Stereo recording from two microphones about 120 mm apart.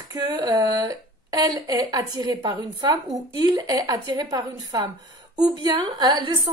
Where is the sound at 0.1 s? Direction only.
35° right (ahead or behind).